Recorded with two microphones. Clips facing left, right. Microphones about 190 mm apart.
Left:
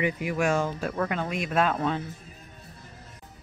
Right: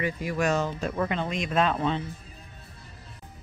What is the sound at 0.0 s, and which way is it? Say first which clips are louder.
A woman's voice: left 1 dB; 15° left (ahead or behind).